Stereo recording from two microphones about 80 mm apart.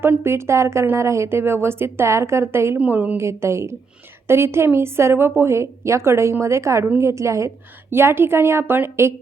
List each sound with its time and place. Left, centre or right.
0.0 s speech: right
2.7 s a woman's voice: centre
3.2 s speech: right